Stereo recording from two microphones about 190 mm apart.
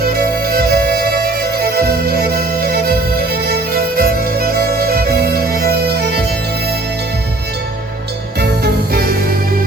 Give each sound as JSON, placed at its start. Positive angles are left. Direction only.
{"t": 0.0, "sound": "music", "side_deg": -55}
{"t": 8.4, "sound": "music", "side_deg": -55}